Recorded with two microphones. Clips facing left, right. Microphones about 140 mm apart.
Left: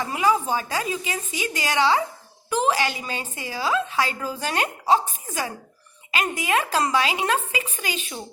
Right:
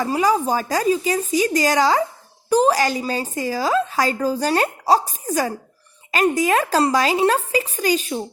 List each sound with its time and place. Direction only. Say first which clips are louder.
0.0 s a woman's voice: right 4 dB; 35° right (ahead or behind)